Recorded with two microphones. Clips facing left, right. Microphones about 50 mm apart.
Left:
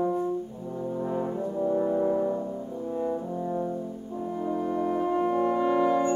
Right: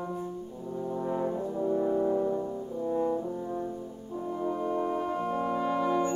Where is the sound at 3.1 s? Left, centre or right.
Centre.